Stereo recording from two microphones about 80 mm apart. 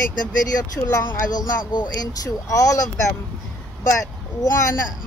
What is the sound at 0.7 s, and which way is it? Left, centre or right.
Speech, left.